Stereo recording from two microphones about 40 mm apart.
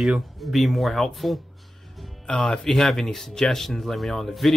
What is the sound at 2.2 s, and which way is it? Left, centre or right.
Speech, centre.